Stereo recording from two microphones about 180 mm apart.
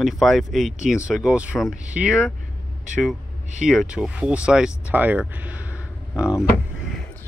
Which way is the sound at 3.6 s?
Centre (ahead or behind).